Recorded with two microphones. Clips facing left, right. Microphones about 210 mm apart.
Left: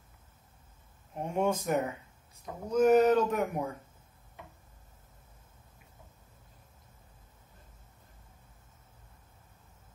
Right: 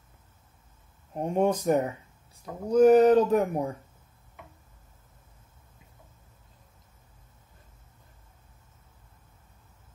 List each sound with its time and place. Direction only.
1.1 s speech: 35° right (ahead or behind)